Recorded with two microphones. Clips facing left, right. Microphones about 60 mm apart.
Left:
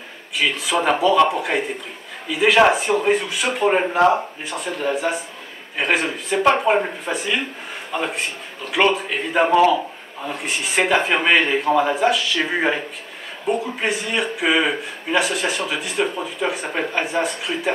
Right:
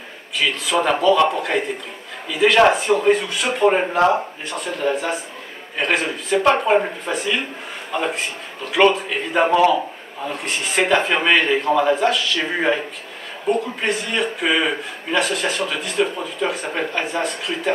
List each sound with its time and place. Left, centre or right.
0.4 s a man's voice: centre